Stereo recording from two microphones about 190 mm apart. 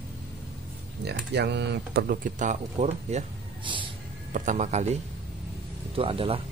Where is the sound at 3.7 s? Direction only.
25° right (ahead or behind).